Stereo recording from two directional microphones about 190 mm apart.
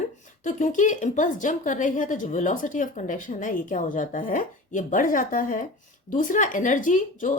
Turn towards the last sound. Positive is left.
turn(degrees=40)  # may be behind; listen again after turning